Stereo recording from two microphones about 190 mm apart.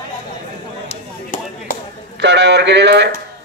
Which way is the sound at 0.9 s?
45° left (ahead or behind).